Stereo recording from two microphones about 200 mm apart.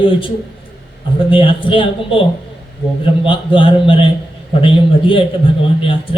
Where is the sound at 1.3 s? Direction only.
25° left (ahead or behind).